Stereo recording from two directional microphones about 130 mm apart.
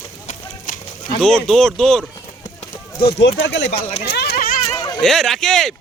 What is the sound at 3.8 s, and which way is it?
Speech, 55° left (ahead or behind).